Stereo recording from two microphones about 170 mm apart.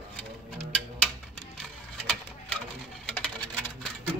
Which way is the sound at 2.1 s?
5° left (ahead or behind).